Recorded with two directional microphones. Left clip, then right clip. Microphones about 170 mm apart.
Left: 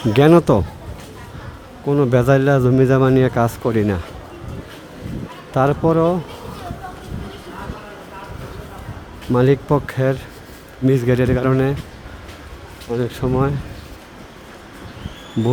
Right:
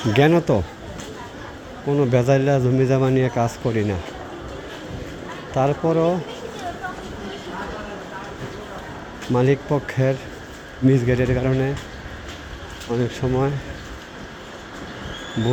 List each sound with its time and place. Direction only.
0.1 s speech: 45° left (ahead or behind)
1.9 s a man's voice: 45° left (ahead or behind)
5.5 s speech: 40° left (ahead or behind)
9.3 s a man's voice: 40° left (ahead or behind)
12.9 s a man's voice: 45° left (ahead or behind)